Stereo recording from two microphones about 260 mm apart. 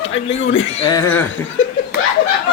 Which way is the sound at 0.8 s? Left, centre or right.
Centre.